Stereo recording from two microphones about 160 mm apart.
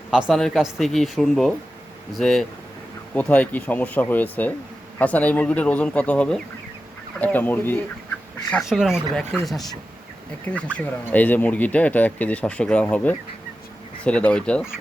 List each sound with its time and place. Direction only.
0.1 s speech: centre (ahead or behind)